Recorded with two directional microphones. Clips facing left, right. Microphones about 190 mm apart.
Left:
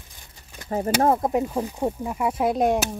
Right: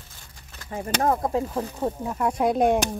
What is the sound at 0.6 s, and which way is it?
Speech, 40° left (ahead or behind).